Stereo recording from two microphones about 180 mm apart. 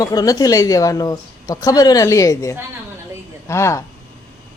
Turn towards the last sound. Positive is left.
turn(degrees=15)  # may be behind; listen again after turning